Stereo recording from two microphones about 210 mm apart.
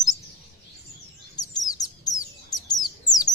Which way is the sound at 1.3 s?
20° left (ahead or behind).